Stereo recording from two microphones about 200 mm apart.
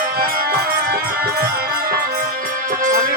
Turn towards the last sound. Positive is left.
turn(degrees=-45)  # may be behind; listen again after turning